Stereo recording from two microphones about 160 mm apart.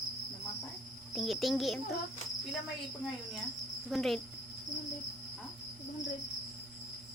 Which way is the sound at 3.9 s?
Centre (ahead or behind).